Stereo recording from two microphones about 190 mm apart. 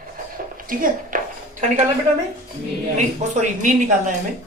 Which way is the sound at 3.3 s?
40° right (ahead or behind).